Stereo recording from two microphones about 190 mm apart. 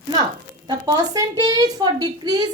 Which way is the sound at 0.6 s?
20° right (ahead or behind).